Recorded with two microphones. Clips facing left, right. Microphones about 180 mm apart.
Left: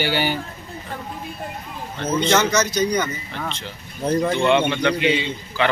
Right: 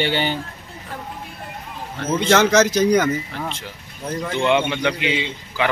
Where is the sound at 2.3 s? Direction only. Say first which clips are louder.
Right 6 dB; 90° right.